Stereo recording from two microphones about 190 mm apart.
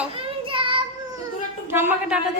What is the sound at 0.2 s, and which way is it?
Child singing, 30° right (ahead or behind).